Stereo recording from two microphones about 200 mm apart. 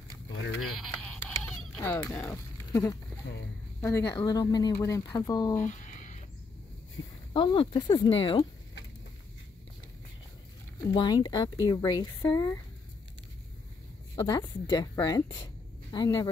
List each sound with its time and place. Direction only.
0.4 s speech: 70° left (ahead or behind)
1.2 s a sound: 10° left (ahead or behind)
2.7 s speech: 15° left (ahead or behind)
5.6 s a sound: 40° left (ahead or behind)
7.3 s a woman's voice: 25° left (ahead or behind)
11.0 s a woman's voice: 20° left (ahead or behind)
14.1 s a woman's voice: 20° left (ahead or behind)